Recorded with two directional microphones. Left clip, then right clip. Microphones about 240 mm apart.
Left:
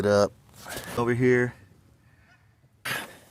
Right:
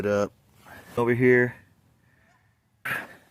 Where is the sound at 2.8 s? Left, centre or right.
Centre.